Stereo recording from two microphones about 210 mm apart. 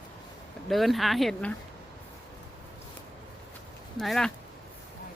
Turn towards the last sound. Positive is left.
turn(degrees=0)  # may be behind; listen again after turning